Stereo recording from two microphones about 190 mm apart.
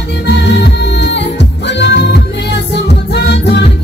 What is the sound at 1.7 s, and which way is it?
Music, 65° left (ahead or behind).